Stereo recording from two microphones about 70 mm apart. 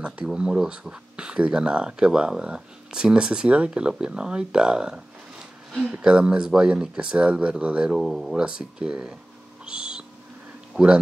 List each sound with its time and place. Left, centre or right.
0.0 s speech: centre
9.7 s a sound: centre
10.8 s speech: right